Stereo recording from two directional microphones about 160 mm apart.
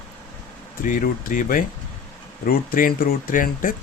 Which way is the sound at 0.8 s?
55° left (ahead or behind).